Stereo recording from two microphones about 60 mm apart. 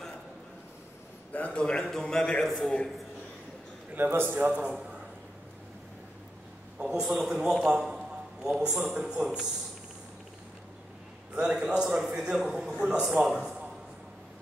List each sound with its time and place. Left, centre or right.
1.3 s a man's voice: left
3.9 s a man's voice: right
6.8 s a man's voice: centre
11.5 s a man's voice: centre